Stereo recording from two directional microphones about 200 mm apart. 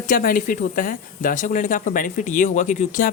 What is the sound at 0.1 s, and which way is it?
Speech, 45° left (ahead or behind).